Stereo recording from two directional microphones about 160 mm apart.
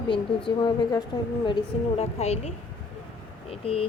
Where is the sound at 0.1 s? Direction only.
30° left (ahead or behind).